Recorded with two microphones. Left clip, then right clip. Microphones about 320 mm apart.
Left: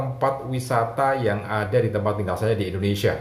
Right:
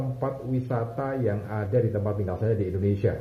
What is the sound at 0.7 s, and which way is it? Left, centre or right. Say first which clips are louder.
Speech: left 11 dB; left.